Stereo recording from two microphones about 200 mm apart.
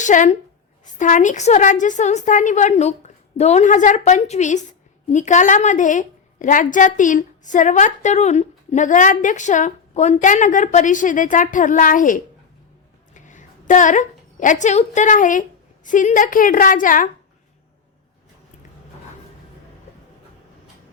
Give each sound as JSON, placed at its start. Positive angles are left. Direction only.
{"t": 0.0, "sound": "a woman's voice", "side_deg": 40}